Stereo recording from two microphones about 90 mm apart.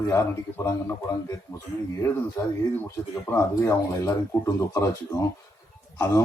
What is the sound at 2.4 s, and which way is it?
A man's voice, 30° left (ahead or behind).